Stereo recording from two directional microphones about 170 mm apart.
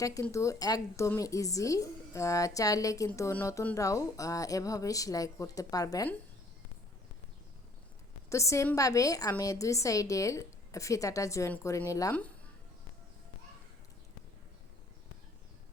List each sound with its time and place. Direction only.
0.0 s a woman's voice: 20° left (ahead or behind)
8.3 s a woman's voice: 15° left (ahead or behind)